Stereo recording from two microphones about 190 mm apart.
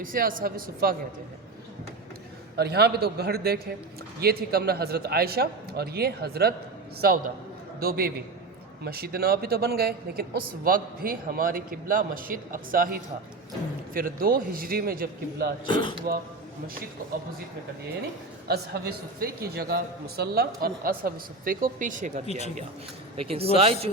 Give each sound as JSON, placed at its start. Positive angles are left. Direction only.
{"t": 0.0, "sound": "speech", "side_deg": -45}
{"t": 2.6, "sound": "a man's voice", "side_deg": -60}
{"t": 7.8, "sound": "speech", "side_deg": -55}
{"t": 15.6, "sound": "speech", "side_deg": 25}
{"t": 18.4, "sound": "speech", "side_deg": -55}
{"t": 22.3, "sound": "speech", "side_deg": 35}
{"t": 23.1, "sound": "speech", "side_deg": -30}